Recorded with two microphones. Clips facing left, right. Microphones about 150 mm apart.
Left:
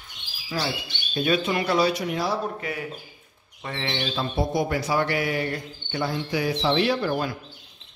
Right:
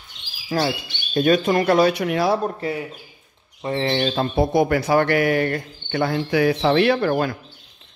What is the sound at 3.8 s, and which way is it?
Speech, 45° right (ahead or behind).